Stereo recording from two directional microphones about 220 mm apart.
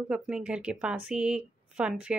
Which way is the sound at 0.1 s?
5° right (ahead or behind).